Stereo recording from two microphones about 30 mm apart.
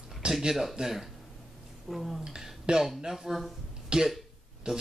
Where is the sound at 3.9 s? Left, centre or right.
Right.